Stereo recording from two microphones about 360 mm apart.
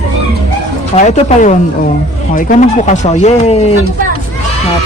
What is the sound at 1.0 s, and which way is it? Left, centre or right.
A man's voice, centre.